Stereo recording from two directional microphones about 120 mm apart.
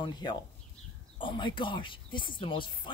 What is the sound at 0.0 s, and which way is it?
Speech, 40° left (ahead or behind).